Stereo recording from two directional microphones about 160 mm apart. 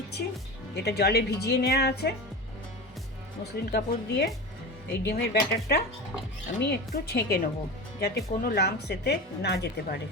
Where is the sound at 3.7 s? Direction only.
90° left.